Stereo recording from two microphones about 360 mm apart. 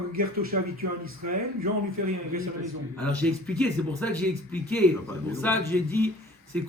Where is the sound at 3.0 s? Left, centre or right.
Centre.